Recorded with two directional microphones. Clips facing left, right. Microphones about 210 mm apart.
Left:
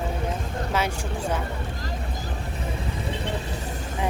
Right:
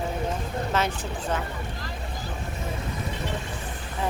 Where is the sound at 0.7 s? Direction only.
10° left (ahead or behind).